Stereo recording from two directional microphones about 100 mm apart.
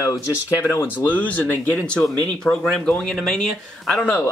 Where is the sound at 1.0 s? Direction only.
15° left (ahead or behind).